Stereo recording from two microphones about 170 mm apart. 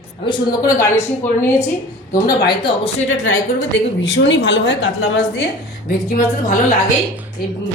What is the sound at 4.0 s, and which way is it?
Speech, 90° left.